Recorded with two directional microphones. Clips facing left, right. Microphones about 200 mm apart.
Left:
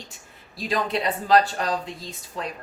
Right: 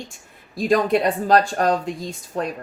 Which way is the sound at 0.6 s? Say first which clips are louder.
Right 8 dB; 50° right (ahead or behind).